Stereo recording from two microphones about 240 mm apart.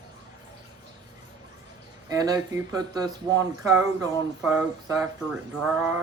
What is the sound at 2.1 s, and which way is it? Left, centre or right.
Speech, centre.